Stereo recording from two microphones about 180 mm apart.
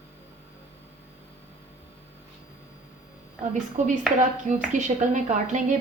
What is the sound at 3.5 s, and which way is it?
A woman's voice, 45° right (ahead or behind).